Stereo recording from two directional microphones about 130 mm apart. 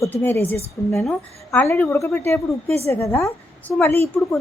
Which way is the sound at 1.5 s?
15° left (ahead or behind).